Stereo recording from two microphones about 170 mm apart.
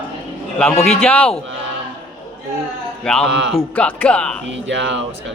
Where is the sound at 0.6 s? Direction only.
5° left (ahead or behind).